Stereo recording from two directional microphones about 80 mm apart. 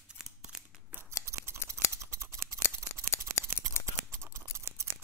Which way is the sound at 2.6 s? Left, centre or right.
Left.